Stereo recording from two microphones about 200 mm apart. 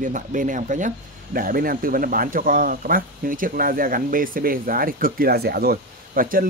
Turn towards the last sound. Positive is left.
turn(degrees=-45)  # may be behind; listen again after turning